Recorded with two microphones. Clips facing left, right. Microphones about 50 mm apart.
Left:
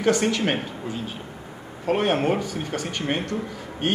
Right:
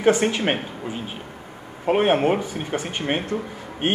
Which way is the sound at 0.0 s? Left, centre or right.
Right.